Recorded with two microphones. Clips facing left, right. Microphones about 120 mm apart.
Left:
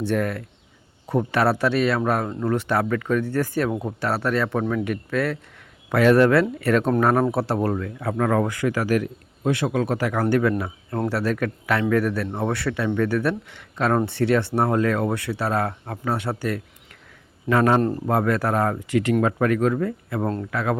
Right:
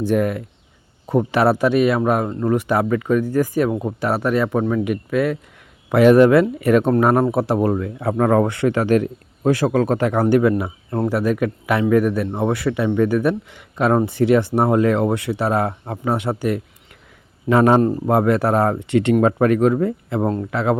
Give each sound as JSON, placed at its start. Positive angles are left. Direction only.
{"t": 0.1, "sound": "speech", "side_deg": -15}
{"t": 9.4, "sound": "speech", "side_deg": -40}